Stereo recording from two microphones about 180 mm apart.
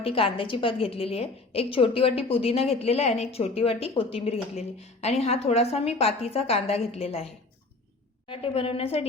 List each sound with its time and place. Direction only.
0.0 s a woman's voice: 30° left (ahead or behind)
8.3 s a woman's voice: 30° left (ahead or behind)